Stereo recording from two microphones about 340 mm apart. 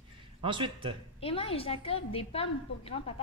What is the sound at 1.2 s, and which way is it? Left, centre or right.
A woman's voice, centre.